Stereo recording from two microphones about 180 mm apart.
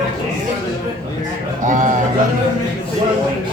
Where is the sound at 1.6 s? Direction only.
45° right (ahead or behind).